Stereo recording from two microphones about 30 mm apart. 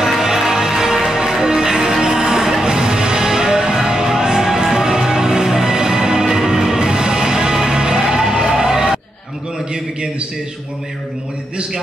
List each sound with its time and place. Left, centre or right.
0.0 s music: centre